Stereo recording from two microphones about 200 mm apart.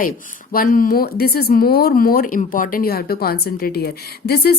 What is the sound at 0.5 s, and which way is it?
A woman's voice, 45° left (ahead or behind).